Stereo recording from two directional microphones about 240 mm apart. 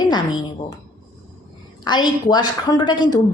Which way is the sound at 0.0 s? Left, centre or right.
Centre.